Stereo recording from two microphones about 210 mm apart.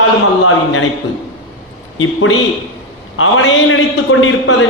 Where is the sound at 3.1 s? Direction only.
70° left (ahead or behind).